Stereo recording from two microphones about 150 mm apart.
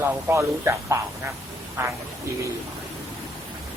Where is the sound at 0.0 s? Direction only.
15° right (ahead or behind).